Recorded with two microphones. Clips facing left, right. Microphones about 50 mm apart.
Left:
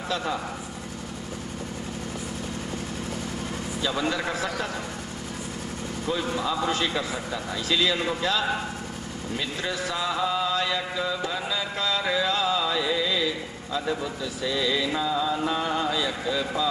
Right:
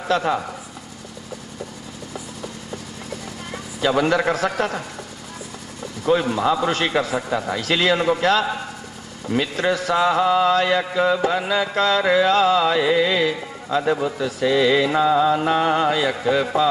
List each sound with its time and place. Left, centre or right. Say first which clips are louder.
0.1 s mantra: right 9 dB; right
3.8 s a man's voice: right 9 dB; right
6.0 s mantra: right 9 dB; right